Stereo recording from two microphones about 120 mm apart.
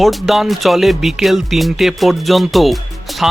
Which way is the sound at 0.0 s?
Centre (ahead or behind).